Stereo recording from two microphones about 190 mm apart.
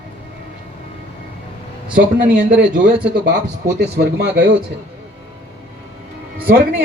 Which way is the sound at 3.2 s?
60° right (ahead or behind).